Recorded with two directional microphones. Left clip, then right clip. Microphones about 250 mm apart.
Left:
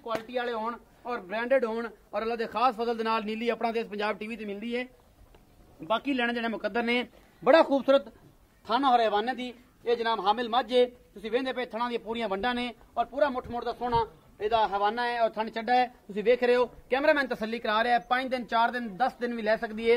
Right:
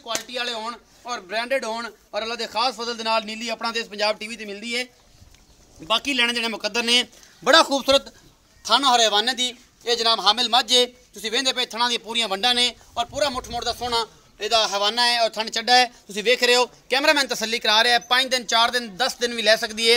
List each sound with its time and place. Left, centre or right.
0.0 s speech: centre
4.6 s speech: centre
5.9 s a man's voice: right
8.6 s a man's voice: right